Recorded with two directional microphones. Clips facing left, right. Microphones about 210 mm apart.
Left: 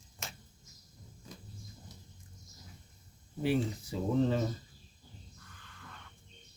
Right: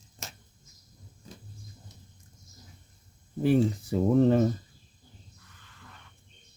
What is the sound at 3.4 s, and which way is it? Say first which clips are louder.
Speech: right 7 dB; 50° right (ahead or behind).